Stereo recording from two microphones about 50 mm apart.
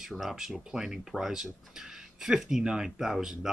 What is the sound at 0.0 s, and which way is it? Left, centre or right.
Speech, centre.